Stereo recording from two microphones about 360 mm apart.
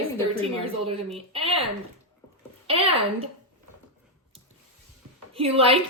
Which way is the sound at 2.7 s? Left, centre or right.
Centre.